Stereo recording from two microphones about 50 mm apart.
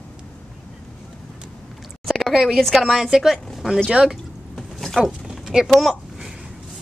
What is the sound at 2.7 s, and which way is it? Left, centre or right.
A woman's voice, centre.